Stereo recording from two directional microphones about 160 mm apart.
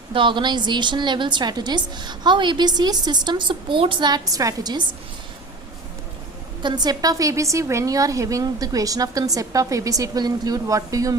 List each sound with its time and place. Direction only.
0.1 s a woman's voice: 30° right (ahead or behind)
6.6 s a woman's voice: 25° right (ahead or behind)